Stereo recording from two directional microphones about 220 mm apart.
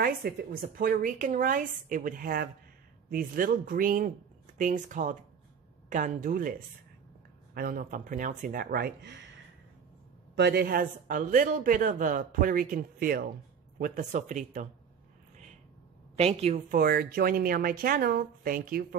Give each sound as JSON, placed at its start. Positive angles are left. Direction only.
{"t": 0.0, "sound": "speech", "side_deg": -40}
{"t": 7.5, "sound": "speech", "side_deg": -40}
{"t": 10.3, "sound": "speech", "side_deg": -50}
{"t": 16.2, "sound": "speech", "side_deg": -30}